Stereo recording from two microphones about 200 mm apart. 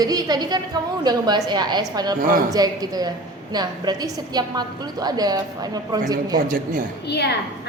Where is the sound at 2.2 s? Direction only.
45° right (ahead or behind).